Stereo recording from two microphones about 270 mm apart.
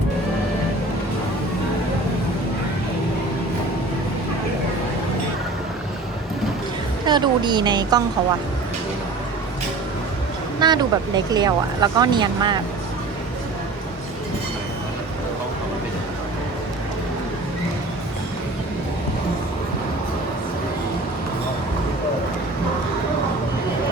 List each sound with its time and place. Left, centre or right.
7.0 s speech: centre
10.6 s speech: centre